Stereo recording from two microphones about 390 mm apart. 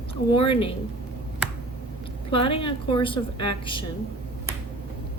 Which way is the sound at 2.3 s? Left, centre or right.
Centre.